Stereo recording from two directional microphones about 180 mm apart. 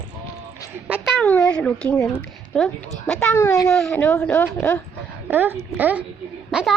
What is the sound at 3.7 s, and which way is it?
Speech, 5° left (ahead or behind).